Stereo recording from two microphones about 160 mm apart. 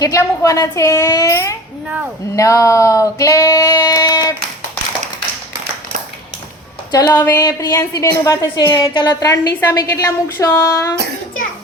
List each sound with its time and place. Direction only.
0.0 s a woman's voice: 20° left (ahead or behind)
6.9 s a woman's voice: 20° left (ahead or behind)